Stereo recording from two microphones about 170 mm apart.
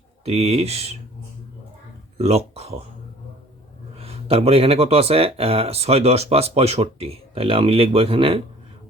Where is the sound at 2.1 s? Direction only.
35° right (ahead or behind).